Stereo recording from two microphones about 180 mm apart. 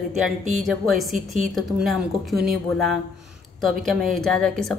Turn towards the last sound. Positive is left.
turn(degrees=0)  # may be behind; listen again after turning